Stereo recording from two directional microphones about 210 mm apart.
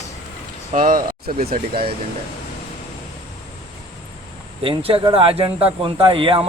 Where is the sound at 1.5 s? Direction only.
25° right (ahead or behind).